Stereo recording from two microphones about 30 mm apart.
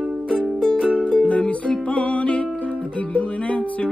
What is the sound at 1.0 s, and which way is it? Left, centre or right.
Music, left.